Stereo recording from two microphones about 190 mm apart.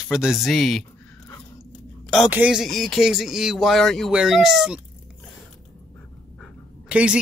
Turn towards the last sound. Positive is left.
turn(degrees=-5)  # may be behind; listen again after turning